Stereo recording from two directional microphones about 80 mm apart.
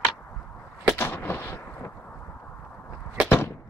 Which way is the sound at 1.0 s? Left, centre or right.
Left.